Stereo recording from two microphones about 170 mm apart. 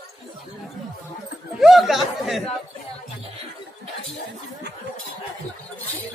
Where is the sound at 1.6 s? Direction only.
Centre (ahead or behind).